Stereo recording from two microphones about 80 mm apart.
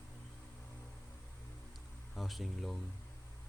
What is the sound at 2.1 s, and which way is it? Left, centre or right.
Speech, centre.